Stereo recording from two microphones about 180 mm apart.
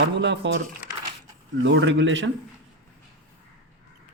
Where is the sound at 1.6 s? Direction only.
85° right.